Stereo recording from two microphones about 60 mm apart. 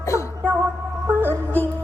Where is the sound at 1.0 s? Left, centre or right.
Right.